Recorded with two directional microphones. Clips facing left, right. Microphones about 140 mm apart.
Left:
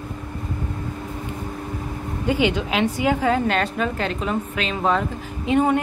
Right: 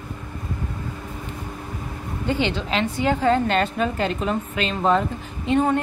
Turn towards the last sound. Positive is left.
turn(degrees=10)  # may be behind; listen again after turning